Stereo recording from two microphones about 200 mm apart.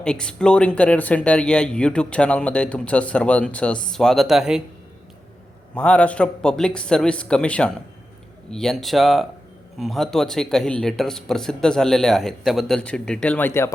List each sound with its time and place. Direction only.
0.0 s speech: 5° left (ahead or behind)
5.7 s speech: 5° left (ahead or behind)